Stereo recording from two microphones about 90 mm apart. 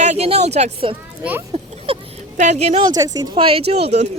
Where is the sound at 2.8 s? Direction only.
45° right (ahead or behind).